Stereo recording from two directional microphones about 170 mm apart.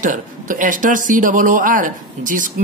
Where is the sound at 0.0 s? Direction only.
50° right (ahead or behind).